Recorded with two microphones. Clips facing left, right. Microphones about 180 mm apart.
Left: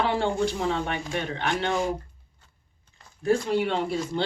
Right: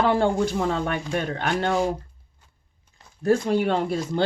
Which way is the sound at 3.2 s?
50° right (ahead or behind).